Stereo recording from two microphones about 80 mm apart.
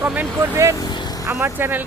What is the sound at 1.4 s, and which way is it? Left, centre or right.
Speech, right.